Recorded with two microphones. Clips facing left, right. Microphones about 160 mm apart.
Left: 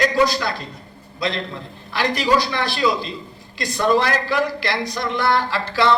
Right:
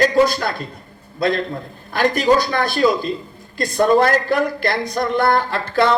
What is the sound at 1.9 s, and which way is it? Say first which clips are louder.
Speech: right 4 dB; 50° right (ahead or behind).